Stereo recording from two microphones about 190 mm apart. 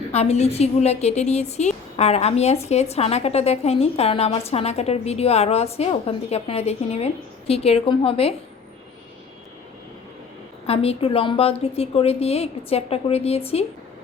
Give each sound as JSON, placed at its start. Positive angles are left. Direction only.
{"t": 0.1, "sound": "a woman's voice", "side_deg": 35}
{"t": 10.7, "sound": "a woman's voice", "side_deg": 30}